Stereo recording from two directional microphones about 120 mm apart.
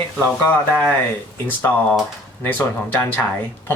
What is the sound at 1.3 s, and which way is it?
Speech, 20° left (ahead or behind).